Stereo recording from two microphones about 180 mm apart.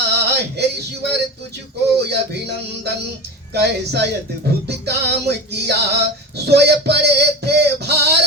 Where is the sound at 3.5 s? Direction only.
65° right (ahead or behind).